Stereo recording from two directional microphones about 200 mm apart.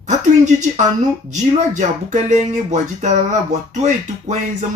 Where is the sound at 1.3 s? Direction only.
35° right (ahead or behind).